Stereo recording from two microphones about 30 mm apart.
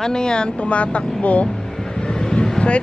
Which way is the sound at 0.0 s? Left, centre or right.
Left.